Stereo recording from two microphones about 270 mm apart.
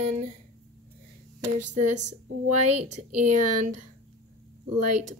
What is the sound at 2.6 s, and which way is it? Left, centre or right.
Speech, right.